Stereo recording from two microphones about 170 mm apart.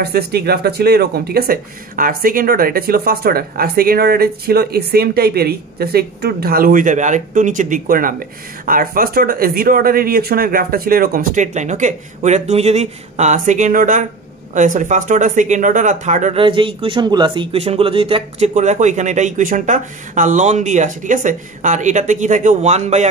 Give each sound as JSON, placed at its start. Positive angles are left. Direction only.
{"t": 0.0, "sound": "speech", "side_deg": -70}
{"t": 16.3, "sound": "speech", "side_deg": -30}
{"t": 18.5, "sound": "speech", "side_deg": -45}